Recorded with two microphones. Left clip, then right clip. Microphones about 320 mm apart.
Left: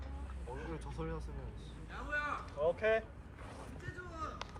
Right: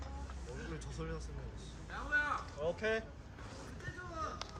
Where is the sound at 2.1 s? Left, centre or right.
Centre.